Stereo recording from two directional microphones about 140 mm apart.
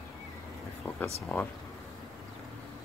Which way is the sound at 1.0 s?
15° left (ahead or behind).